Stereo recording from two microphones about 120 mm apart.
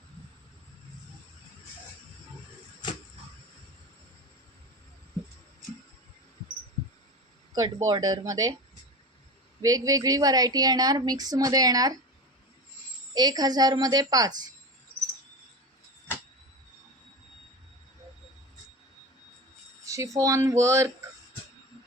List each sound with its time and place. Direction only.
7.5 s a woman's voice: 30° right (ahead or behind)
9.6 s a woman's voice: 30° right (ahead or behind)
13.1 s a woman's voice: 35° right (ahead or behind)
19.8 s speech: 25° right (ahead or behind)